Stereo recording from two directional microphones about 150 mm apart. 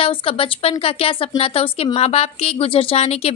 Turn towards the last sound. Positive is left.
turn(degrees=45)  # may be behind; listen again after turning